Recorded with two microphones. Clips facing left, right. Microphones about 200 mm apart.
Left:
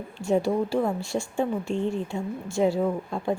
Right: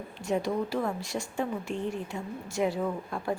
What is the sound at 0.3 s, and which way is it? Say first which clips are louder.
Speech: left 5 dB; 30° left (ahead or behind).